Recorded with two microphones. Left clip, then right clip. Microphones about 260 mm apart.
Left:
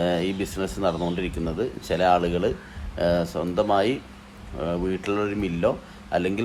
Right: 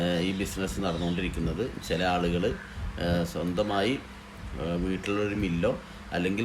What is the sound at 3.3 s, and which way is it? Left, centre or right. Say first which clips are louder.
Speech: left 5 dB; left.